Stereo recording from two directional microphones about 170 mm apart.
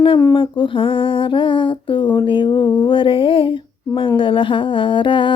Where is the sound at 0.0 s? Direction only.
30° left (ahead or behind).